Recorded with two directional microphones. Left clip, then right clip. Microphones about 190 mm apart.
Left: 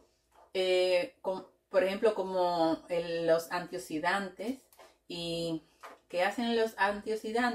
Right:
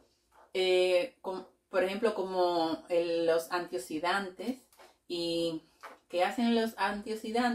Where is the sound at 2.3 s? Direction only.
15° right (ahead or behind).